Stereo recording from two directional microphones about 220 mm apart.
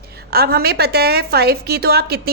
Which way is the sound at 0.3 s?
45° right (ahead or behind).